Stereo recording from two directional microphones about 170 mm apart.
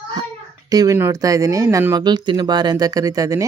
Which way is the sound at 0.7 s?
20° right (ahead or behind).